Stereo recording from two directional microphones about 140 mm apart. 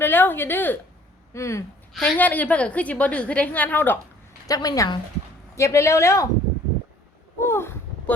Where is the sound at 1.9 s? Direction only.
5° left (ahead or behind).